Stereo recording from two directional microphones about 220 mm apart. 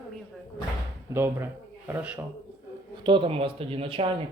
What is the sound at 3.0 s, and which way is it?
A man's voice, 20° right (ahead or behind).